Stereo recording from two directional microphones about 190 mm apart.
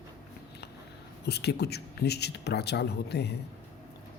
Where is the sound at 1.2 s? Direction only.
60° left (ahead or behind).